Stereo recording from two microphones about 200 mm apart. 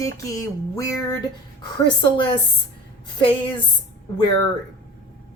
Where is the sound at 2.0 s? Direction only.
25° left (ahead or behind).